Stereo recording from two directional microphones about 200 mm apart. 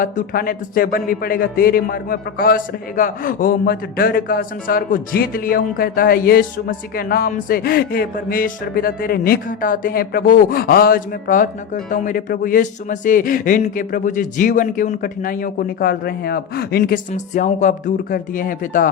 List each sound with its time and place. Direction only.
0.0 s a man's voice: 45° left (ahead or behind)